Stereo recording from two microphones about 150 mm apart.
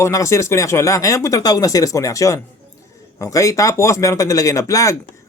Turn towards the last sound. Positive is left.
turn(degrees=20)  # may be behind; listen again after turning